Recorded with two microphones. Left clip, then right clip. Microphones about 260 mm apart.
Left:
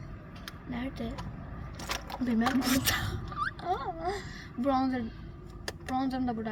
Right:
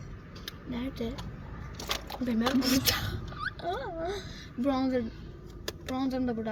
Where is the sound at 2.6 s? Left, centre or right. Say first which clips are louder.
Right 1 dB; left.